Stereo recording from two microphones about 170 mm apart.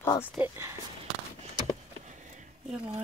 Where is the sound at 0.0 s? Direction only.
15° left (ahead or behind).